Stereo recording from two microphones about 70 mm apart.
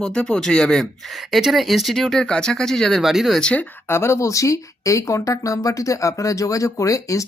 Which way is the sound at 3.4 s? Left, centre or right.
Centre.